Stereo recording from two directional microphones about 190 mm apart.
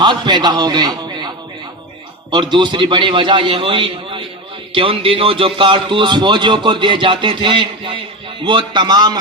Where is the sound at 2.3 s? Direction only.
25° right (ahead or behind).